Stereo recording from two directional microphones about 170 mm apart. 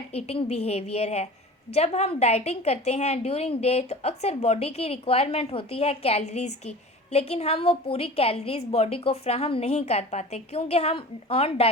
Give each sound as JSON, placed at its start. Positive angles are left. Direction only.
{"t": 0.1, "sound": "a woman's voice", "side_deg": 35}